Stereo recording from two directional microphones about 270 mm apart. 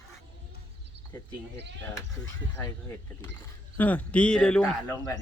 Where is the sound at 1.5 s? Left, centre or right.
Right.